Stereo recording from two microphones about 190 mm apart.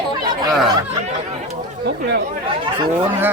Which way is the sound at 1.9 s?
65° right (ahead or behind).